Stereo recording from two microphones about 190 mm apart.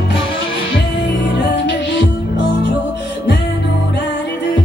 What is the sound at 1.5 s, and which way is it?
Music, 65° left (ahead or behind).